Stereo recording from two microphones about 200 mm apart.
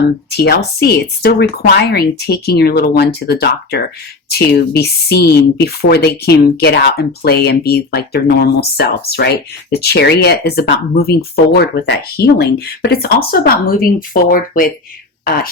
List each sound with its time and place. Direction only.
0.3 s speech: 55° left (ahead or behind)